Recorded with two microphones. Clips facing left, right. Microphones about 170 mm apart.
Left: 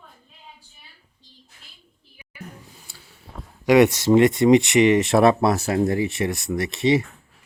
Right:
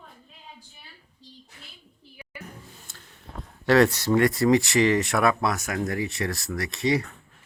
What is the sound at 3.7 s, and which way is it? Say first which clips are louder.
Speech: left 4 dB; 20° left (ahead or behind).